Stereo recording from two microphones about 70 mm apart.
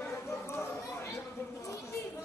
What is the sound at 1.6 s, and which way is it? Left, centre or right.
Chatter, left.